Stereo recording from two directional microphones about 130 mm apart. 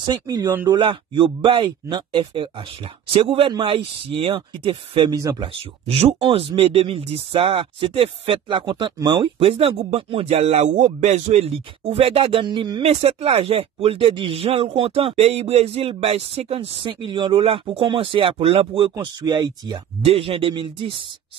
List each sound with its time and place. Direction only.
0.0 s speech: 30° right (ahead or behind)
5.1 s speech: 25° right (ahead or behind)
5.4 s speech: 45° right (ahead or behind)
12.8 s speech: 50° right (ahead or behind)
18.9 s speech: 30° right (ahead or behind)
20.1 s speech: 45° right (ahead or behind)